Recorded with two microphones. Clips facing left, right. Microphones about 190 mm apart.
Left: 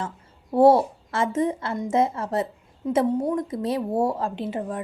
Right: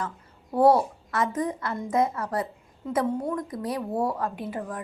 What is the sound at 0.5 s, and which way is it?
A woman's voice, 25° left (ahead or behind).